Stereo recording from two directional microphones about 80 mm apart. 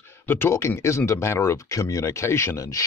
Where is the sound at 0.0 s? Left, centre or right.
Left.